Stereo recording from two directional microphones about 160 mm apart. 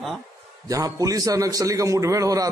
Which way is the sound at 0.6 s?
20° right (ahead or behind).